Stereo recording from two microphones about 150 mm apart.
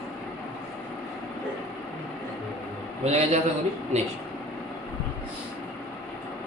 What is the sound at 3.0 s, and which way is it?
A man's voice, 45° right (ahead or behind).